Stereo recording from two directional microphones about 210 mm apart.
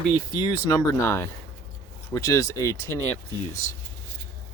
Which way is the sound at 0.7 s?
20° left (ahead or behind).